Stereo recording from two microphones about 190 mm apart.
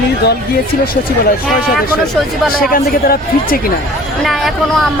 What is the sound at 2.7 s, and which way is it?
Speech, 50° left (ahead or behind).